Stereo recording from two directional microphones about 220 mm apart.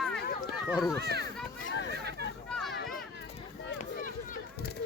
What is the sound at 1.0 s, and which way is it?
Speech, 45° right (ahead or behind).